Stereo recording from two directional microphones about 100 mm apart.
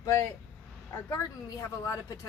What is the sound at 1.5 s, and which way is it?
Speech, 35° left (ahead or behind).